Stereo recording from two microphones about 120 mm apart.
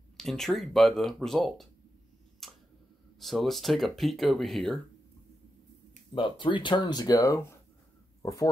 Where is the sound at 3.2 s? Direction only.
Centre (ahead or behind).